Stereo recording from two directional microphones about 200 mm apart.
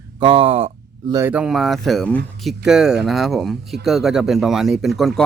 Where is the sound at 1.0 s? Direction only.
15° right (ahead or behind).